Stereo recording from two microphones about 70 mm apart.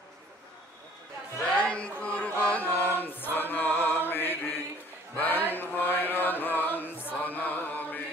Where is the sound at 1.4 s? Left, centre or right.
Centre; by 3.2 s left.